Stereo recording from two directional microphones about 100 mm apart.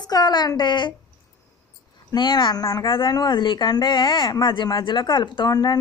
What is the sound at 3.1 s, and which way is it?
Speech, 45° left (ahead or behind).